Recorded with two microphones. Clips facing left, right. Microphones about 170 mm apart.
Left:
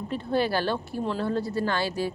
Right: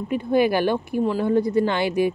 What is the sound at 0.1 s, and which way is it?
Speech, 15° right (ahead or behind).